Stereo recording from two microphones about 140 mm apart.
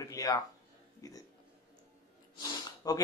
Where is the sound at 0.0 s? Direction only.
25° left (ahead or behind).